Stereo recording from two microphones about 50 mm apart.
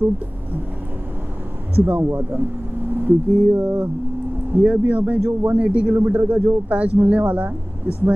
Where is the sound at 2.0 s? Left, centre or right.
Right.